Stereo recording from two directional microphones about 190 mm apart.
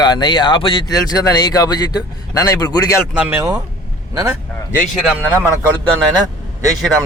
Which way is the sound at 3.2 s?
15° right (ahead or behind).